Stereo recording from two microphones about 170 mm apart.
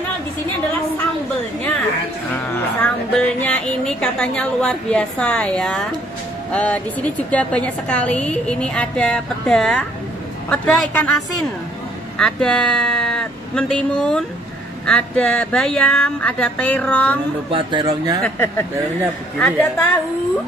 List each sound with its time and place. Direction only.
2.8 s a sound: 10° left (ahead or behind)
6.5 s a woman's voice: 10° left (ahead or behind)
17.5 s speech: 30° right (ahead or behind)
18.2 s a woman's voice: 10° left (ahead or behind)